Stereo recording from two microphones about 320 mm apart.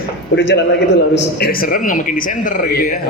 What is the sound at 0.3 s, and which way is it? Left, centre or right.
A man's voice, left.